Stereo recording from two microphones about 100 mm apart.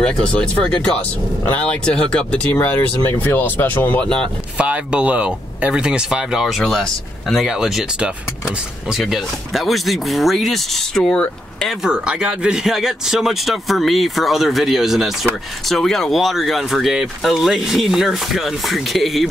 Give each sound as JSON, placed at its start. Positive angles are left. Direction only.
{"t": 0.0, "sound": "speech", "side_deg": 10}
{"t": 2.5, "sound": "speech", "side_deg": 20}
{"t": 4.6, "sound": "speech", "side_deg": -15}
{"t": 11.8, "sound": "speech", "side_deg": -10}